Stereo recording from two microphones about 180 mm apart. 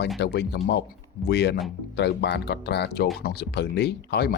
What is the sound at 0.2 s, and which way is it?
Speech, 70° left (ahead or behind).